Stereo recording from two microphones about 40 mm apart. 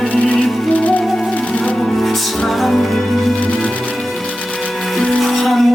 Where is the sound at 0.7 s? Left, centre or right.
Left.